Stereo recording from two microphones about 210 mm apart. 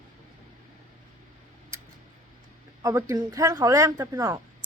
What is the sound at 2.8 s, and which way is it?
Speech, 15° right (ahead or behind).